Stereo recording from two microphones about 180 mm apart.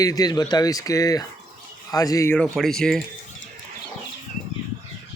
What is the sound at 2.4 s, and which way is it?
Speech, centre (ahead or behind).